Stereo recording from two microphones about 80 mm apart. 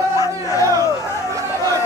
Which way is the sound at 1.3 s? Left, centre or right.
Right.